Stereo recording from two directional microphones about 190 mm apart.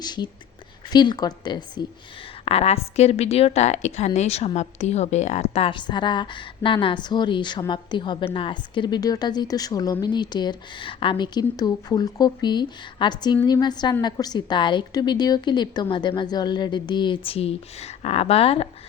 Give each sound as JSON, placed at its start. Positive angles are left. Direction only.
{"t": 0.0, "sound": "a woman's voice", "side_deg": 20}